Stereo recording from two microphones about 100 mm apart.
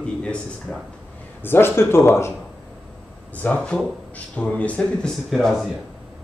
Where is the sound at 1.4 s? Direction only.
20° left (ahead or behind).